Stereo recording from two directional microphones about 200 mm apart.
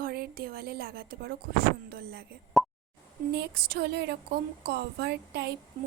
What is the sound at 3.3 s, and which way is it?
A woman's voice, 55° right (ahead or behind).